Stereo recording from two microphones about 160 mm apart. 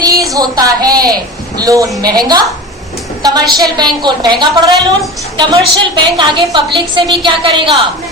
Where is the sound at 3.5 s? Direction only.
25° right (ahead or behind).